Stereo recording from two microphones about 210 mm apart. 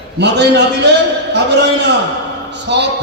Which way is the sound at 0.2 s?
55° right (ahead or behind).